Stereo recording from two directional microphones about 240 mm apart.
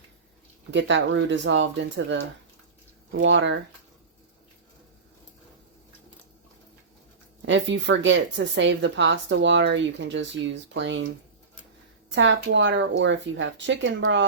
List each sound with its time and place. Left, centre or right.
0.7 s speech: right
7.4 s speech: right
12.1 s speech: right